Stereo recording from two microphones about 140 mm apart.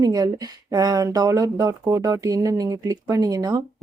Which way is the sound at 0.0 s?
25° right (ahead or behind).